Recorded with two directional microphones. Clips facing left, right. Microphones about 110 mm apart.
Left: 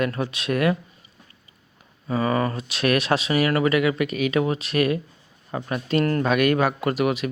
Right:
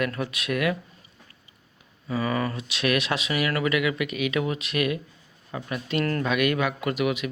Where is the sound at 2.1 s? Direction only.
40° left (ahead or behind).